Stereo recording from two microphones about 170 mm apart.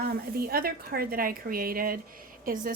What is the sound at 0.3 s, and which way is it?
A woman's voice, 60° right (ahead or behind).